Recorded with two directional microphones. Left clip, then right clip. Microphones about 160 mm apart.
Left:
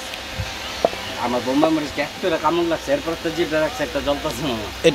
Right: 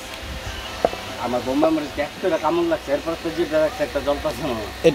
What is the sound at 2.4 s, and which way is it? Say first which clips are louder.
Speech: left 3 dB; 90° left.